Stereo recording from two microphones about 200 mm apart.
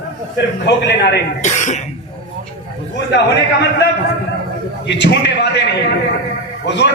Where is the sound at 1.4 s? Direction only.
35° left (ahead or behind).